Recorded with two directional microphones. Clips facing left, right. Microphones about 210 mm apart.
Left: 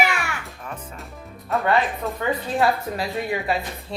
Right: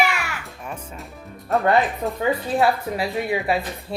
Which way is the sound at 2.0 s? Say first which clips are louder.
Right 2 dB; 35° right (ahead or behind).